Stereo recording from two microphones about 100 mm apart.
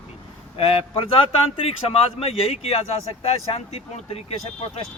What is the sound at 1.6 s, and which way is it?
Speech, 80° left.